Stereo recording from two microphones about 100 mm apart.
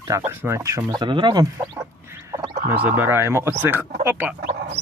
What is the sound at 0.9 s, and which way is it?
Speech, 50° right (ahead or behind).